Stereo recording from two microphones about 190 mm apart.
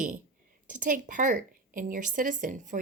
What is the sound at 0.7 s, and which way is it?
A woman's voice, 45° right (ahead or behind).